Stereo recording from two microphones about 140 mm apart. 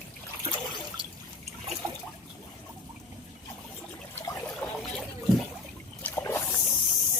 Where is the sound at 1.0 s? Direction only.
35° right (ahead or behind).